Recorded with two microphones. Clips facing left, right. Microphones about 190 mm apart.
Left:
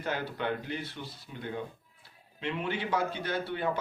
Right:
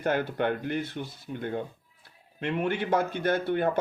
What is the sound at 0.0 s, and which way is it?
Speech, 55° right (ahead or behind).